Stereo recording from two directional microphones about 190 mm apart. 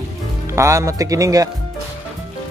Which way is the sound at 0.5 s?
15° right (ahead or behind).